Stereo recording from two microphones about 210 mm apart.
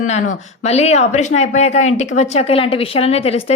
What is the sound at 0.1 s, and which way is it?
A woman's voice, 30° left (ahead or behind).